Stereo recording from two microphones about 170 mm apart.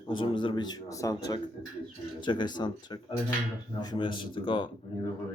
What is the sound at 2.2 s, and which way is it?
A man's voice, 25° left (ahead or behind).